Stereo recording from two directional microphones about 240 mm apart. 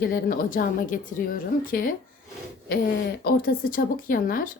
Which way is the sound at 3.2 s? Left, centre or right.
Left.